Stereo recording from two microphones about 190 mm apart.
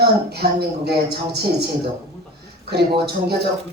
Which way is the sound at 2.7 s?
60° right (ahead or behind).